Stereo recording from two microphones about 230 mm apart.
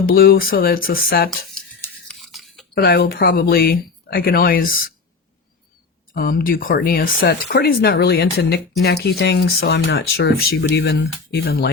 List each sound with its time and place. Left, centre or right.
0.0 s speech: left
2.0 s toothbrush: centre
2.7 s speech: left
6.1 s speech: left